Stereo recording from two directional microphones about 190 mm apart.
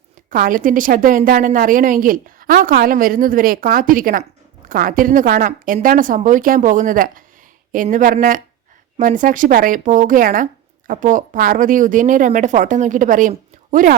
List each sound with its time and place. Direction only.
0.3 s speech: 45° right (ahead or behind)